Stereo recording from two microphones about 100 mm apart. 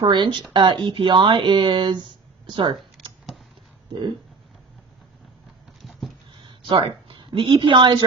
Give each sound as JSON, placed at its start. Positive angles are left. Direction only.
{"t": 0.0, "sound": "speech", "side_deg": -50}
{"t": 6.4, "sound": "speech", "side_deg": -55}